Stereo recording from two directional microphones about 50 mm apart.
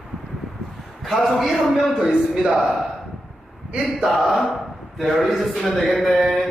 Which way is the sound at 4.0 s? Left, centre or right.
Centre.